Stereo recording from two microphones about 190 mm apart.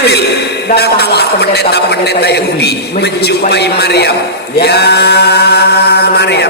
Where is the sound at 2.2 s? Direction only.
60° left (ahead or behind).